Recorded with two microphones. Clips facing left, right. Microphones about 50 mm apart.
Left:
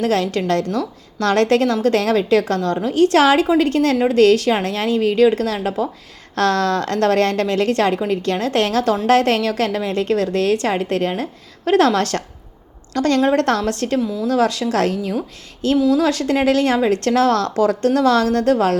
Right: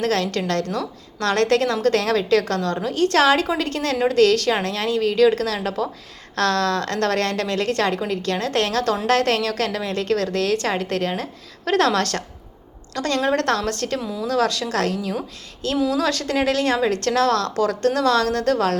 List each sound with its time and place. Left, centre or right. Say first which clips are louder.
0.0 s a woman's voice: left 3 dB; left
14.0 s speech: left 5 dB; centre
14.3 s a woman's voice: left 2 dB; left